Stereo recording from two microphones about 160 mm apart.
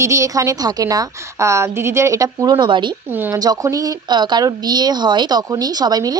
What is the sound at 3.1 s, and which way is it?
Speech, 10° right (ahead or behind).